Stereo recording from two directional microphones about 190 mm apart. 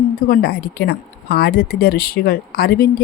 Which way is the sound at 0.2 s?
55° left (ahead or behind).